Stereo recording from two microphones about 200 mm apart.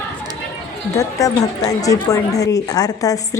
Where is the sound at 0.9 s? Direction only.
15° left (ahead or behind).